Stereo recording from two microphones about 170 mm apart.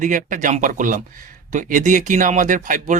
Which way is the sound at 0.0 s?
50° right (ahead or behind).